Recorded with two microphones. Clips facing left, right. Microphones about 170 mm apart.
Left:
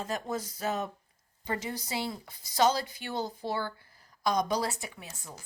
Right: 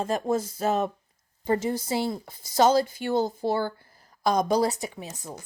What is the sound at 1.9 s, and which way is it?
Speech, 45° right (ahead or behind).